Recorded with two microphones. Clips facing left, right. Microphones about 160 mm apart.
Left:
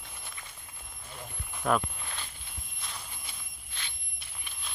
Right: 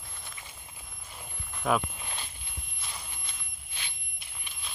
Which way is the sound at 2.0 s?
15° right (ahead or behind).